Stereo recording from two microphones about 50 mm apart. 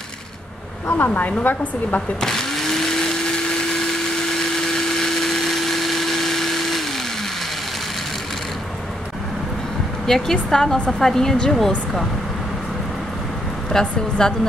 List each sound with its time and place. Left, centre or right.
0.9 s a woman's voice: left
2.1 s blender: centre
10.0 s a woman's voice: centre
13.7 s a woman's voice: centre